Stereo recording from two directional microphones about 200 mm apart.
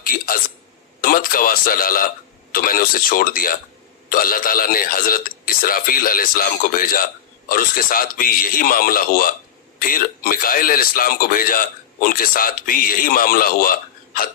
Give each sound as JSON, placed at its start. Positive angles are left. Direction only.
{"t": 0.1, "sound": "a man's voice", "side_deg": 45}